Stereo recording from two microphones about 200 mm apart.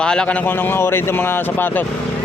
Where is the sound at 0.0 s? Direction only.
5° left (ahead or behind).